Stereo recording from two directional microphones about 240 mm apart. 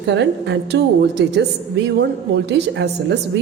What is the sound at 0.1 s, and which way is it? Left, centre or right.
A woman's voice, right.